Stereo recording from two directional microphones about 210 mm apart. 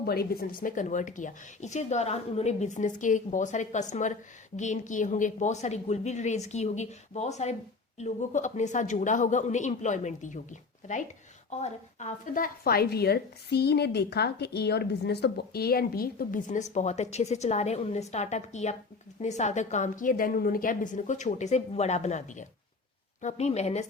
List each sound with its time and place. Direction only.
0.0 s a woman's voice: 45° left (ahead or behind)
0.6 s a woman's voice: 35° left (ahead or behind)